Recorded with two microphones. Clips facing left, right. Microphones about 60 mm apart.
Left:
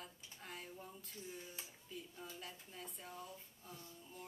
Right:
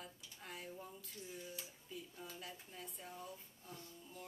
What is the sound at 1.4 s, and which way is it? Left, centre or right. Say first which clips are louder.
Speech: right 3 dB; left.